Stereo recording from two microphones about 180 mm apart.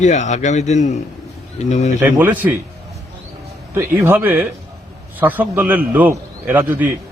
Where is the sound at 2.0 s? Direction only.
10° right (ahead or behind).